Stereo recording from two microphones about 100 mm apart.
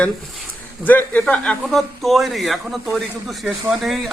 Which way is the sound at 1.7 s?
Centre (ahead or behind).